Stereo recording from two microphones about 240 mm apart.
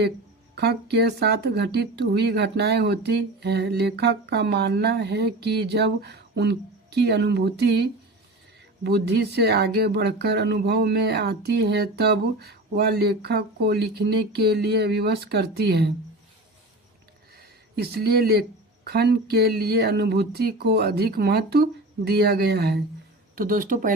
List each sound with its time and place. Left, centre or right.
0.5 s speech: right
17.7 s speech: right